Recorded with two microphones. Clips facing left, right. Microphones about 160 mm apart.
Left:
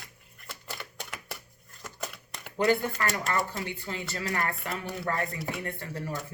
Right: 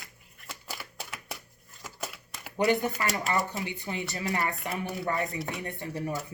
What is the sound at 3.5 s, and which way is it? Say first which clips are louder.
Speech: right 1 dB; 15° right (ahead or behind).